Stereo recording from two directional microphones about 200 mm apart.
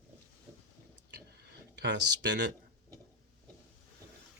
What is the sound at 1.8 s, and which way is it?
Speech, 60° right (ahead or behind).